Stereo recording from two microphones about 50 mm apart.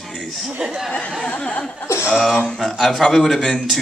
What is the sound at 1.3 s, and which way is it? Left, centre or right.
Speech, left.